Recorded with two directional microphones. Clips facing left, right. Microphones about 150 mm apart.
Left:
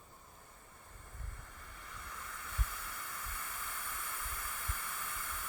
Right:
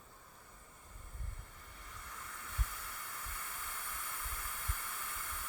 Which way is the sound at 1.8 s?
90° left.